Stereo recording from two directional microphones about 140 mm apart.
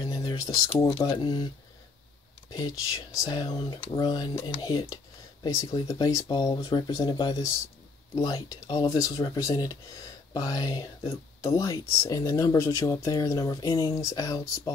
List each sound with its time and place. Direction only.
0.0 s typing: 30° left (ahead or behind)
0.9 s speech: 30° left (ahead or behind)
2.5 s speech: 25° left (ahead or behind)